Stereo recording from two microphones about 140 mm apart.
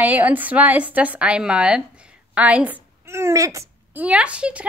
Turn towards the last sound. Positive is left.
turn(degrees=-10)  # may be behind; listen again after turning